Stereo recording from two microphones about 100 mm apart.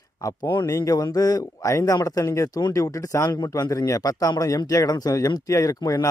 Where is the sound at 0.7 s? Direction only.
35° left (ahead or behind).